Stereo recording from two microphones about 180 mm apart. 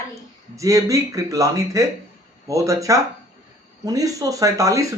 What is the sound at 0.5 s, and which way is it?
Speech, 20° right (ahead or behind).